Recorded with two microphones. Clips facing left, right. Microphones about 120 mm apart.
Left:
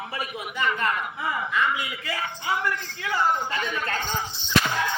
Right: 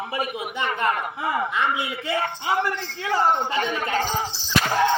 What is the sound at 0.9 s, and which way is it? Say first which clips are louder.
Speech: right 3 dB; 45° right (ahead or behind).